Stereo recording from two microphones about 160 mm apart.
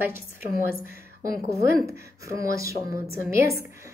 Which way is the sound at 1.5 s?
20° right (ahead or behind).